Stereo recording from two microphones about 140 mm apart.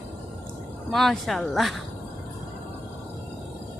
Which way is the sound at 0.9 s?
5° left (ahead or behind).